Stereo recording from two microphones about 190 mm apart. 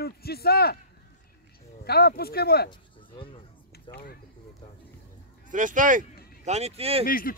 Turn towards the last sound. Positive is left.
turn(degrees=50)  # may be behind; listen again after turning